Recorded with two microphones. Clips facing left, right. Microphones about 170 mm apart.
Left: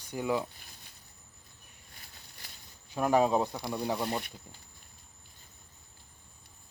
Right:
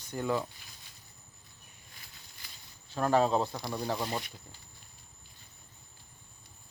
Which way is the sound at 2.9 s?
15° left (ahead or behind).